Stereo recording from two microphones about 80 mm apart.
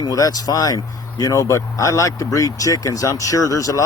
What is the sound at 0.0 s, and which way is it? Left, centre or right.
Speech, left.